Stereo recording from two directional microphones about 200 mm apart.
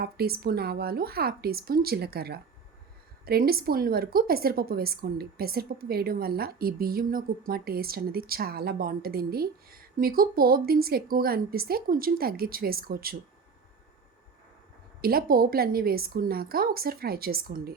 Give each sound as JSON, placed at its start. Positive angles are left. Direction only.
{"t": 0.0, "sound": "a woman's voice", "side_deg": -50}
{"t": 15.0, "sound": "a woman's voice", "side_deg": -45}